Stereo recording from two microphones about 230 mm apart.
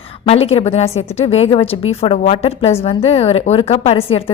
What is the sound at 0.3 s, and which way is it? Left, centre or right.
A woman's voice, left.